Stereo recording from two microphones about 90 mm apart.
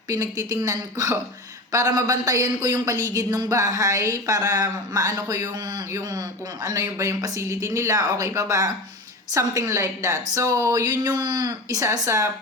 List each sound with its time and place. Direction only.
0.1 s speech: 40° right (ahead or behind)